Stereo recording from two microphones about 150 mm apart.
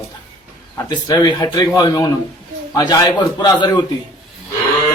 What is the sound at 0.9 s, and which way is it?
Speech, 30° left (ahead or behind).